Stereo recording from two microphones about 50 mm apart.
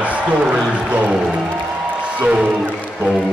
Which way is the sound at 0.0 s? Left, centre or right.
Right.